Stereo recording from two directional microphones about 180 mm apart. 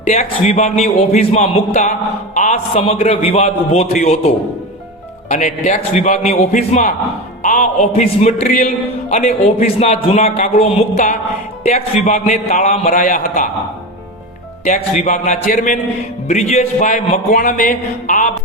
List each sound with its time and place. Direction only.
0.1 s a man's voice: 35° left (ahead or behind)
5.3 s a man's voice: 40° left (ahead or behind)
14.6 s a man's voice: 40° left (ahead or behind)